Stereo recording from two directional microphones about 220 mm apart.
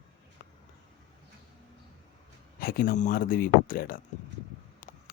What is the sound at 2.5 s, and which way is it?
Speech, 40° left (ahead or behind).